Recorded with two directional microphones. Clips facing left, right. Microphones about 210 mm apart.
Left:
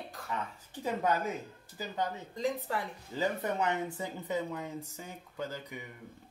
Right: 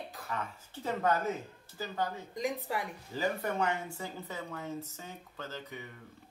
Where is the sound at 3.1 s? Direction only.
20° left (ahead or behind).